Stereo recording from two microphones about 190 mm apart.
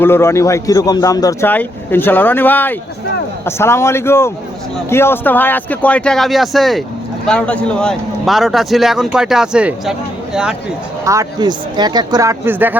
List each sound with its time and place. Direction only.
0.0 s a man's voice: 15° left (ahead or behind); by 9.9 s 5° right (ahead or behind)
11.0 s speech: 15° right (ahead or behind)